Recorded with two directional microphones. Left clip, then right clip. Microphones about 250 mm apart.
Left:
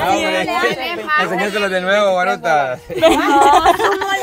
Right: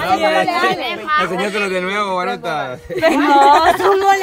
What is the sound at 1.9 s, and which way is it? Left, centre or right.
Speech, centre.